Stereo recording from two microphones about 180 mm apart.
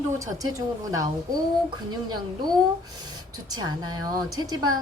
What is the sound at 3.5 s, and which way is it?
Speech, 20° right (ahead or behind).